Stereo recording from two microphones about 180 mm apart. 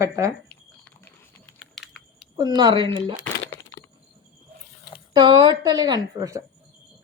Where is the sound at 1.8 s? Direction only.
Centre (ahead or behind).